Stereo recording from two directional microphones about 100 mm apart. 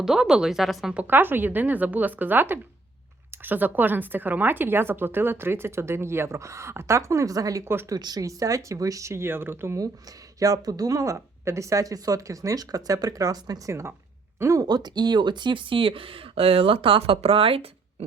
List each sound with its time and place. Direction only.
0.0 s speech: 5° right (ahead or behind)
0.9 s a woman's voice: 20° right (ahead or behind)
9.7 s speech: 35° right (ahead or behind); by 17.7 s 65° right (ahead or behind)